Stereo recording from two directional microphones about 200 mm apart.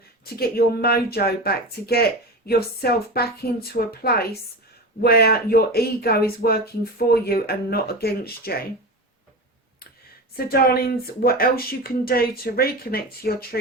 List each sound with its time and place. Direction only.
0.3 s speech: 50° left (ahead or behind)
10.3 s speech: 50° left (ahead or behind)